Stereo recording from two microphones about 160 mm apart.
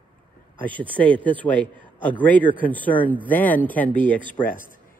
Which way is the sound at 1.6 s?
30° right (ahead or behind).